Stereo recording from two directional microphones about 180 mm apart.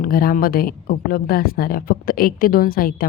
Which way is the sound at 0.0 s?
55° left (ahead or behind).